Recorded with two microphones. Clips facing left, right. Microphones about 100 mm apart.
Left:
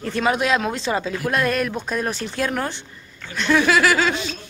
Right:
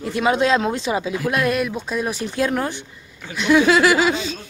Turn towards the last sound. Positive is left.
turn(degrees=-15)  # may be behind; listen again after turning